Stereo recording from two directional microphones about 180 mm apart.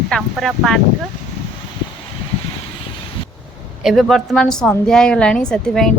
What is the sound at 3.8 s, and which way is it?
Speech, centre (ahead or behind).